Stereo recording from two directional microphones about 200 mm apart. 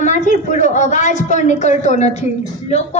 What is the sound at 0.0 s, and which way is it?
A woman's voice, 40° left (ahead or behind).